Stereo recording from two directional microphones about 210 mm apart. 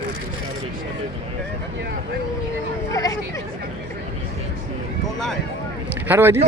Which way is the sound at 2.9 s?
15° left (ahead or behind).